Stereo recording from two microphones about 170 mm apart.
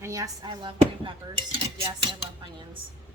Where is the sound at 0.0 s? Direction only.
20° right (ahead or behind).